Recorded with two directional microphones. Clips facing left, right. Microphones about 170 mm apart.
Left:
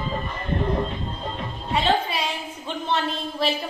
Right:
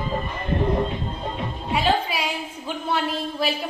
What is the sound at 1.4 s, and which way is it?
Music, 10° right (ahead or behind).